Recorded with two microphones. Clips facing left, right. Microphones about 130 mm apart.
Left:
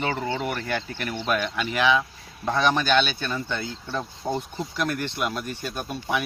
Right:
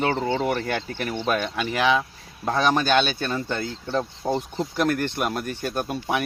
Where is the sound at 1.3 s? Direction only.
40° right (ahead or behind).